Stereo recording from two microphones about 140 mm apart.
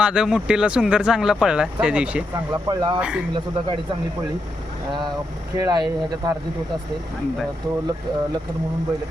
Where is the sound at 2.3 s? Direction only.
30° right (ahead or behind).